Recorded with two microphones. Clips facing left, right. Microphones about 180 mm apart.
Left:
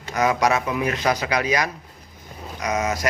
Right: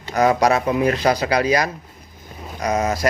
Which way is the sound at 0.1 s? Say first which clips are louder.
Right 4 dB; 35° right (ahead or behind).